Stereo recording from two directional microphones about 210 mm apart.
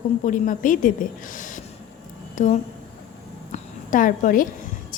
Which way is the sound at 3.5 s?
40° left (ahead or behind).